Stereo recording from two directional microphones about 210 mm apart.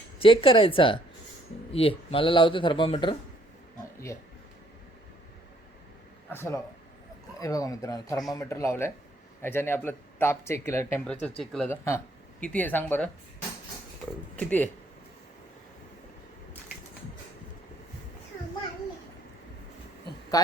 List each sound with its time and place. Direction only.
0.2 s speech: 25° left (ahead or behind)
6.3 s speech: 15° left (ahead or behind)
20.3 s speech: 15° left (ahead or behind)